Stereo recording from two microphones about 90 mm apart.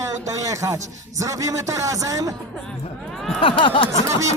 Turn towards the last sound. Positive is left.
turn(degrees=-35)  # may be behind; listen again after turning